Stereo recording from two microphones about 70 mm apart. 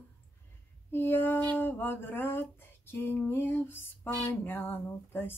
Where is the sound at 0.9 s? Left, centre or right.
Left.